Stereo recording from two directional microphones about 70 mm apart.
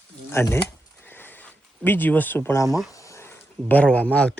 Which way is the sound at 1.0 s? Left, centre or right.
Left.